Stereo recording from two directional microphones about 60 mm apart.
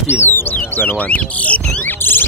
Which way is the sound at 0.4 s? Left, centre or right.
Left.